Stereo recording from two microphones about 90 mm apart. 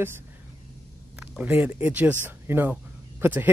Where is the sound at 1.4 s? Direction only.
20° right (ahead or behind).